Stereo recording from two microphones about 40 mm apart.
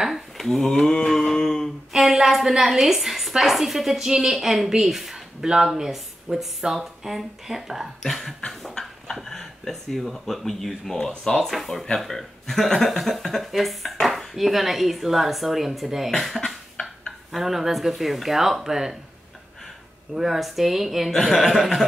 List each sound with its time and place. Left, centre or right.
0.1 s speech: centre
1.9 s a woman's voice: centre
8.1 s a woman's voice: centre
8.8 s a sound: left
9.1 s a woman's voice: centre
17.4 s speech: centre
20.2 s a woman's voice: centre